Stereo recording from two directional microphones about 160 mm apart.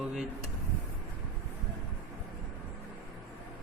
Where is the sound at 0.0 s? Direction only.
5° right (ahead or behind).